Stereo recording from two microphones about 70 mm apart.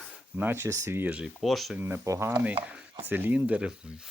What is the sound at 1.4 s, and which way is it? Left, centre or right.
Speech, centre.